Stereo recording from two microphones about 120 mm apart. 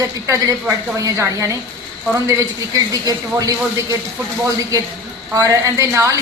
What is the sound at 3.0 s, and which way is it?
Speech, 30° right (ahead or behind).